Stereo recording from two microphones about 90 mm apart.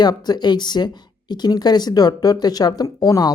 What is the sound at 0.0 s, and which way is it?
Speech, 50° left (ahead or behind).